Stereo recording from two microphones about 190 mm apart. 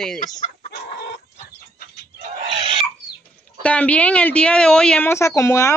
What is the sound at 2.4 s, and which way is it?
Chicken, 35° right (ahead or behind).